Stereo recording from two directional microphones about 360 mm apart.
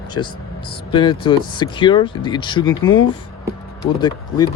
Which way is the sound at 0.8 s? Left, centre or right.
Centre.